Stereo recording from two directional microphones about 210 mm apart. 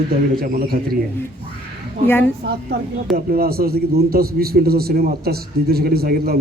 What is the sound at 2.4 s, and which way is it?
A man's voice, 55° right (ahead or behind).